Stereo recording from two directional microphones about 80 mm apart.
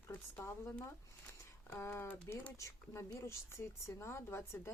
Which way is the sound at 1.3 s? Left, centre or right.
Left.